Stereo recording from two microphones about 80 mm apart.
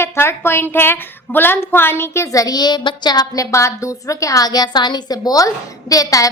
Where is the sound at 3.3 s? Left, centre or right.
Left.